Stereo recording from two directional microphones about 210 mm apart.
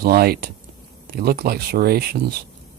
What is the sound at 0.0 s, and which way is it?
Speech, 45° right (ahead or behind).